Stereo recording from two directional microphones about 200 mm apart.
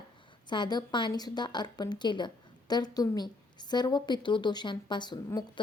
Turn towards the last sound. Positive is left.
turn(degrees=20)  # may be behind; listen again after turning